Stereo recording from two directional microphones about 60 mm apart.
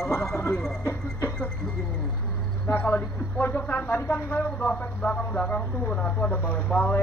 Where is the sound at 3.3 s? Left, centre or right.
Left.